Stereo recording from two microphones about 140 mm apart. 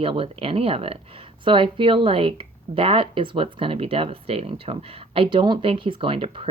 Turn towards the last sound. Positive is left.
turn(degrees=-40)  # may be behind; listen again after turning